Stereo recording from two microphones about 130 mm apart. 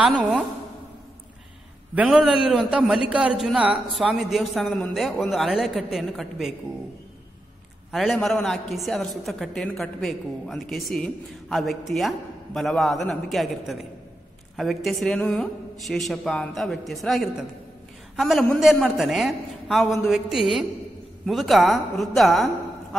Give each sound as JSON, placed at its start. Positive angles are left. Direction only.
{"t": 0.0, "sound": "a man's voice", "side_deg": 0}
{"t": 2.0, "sound": "a man's voice", "side_deg": -5}
{"t": 7.9, "sound": "a man's voice", "side_deg": 0}